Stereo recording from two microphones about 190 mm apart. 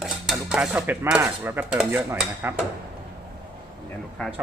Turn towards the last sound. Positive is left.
turn(degrees=0)  # may be behind; listen again after turning